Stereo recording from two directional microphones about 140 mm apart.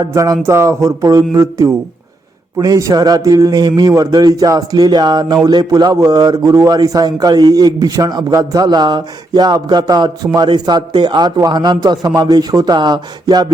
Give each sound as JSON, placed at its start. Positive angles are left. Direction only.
{"t": 0.0, "sound": "a man's voice", "side_deg": -25}